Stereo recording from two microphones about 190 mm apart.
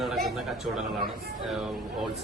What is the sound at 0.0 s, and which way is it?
Speech, centre (ahead or behind).